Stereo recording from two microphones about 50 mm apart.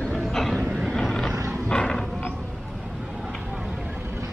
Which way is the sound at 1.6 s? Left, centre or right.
Centre.